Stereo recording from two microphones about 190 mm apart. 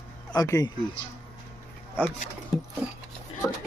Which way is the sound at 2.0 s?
10° left (ahead or behind).